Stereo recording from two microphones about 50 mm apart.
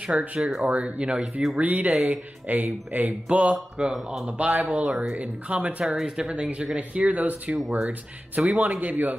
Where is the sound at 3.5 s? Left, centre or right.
Centre.